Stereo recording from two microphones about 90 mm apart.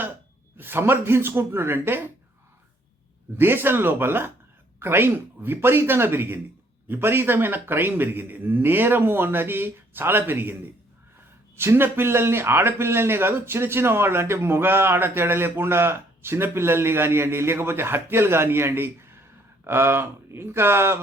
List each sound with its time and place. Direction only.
0.5 s speech: 25° right (ahead or behind)
3.3 s speech: 25° right (ahead or behind)
11.5 s speech: 25° right (ahead or behind)